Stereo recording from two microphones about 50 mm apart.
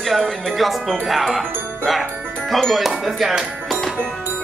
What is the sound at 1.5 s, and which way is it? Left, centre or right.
Music, right.